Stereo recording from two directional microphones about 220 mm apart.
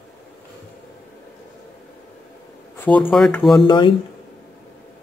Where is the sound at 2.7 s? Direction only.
10° left (ahead or behind).